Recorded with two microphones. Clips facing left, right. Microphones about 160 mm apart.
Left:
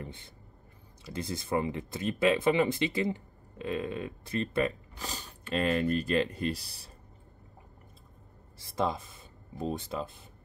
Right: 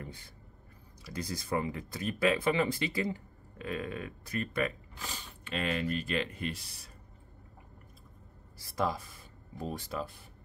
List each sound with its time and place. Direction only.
0.0 s a sound: 25° left (ahead or behind)
1.0 s speech: 25° left (ahead or behind)
8.5 s speech: 25° left (ahead or behind)